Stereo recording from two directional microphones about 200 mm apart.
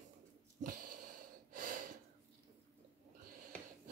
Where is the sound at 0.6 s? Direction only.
45° right (ahead or behind).